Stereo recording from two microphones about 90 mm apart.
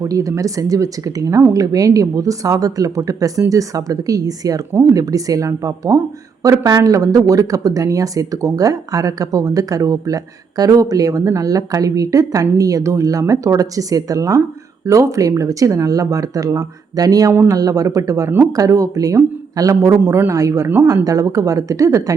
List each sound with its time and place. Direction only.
0.0 s speech: 40° right (ahead or behind)